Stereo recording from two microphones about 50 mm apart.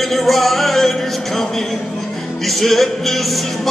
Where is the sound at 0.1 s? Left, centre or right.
Centre.